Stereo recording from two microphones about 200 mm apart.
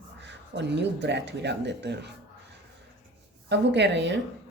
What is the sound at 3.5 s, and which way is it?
Speech, 60° right (ahead or behind).